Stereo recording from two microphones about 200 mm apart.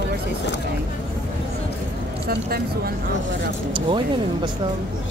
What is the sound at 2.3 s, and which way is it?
Vehicle, 50° right (ahead or behind).